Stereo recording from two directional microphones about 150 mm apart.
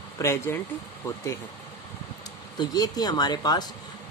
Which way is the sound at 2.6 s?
25° left (ahead or behind).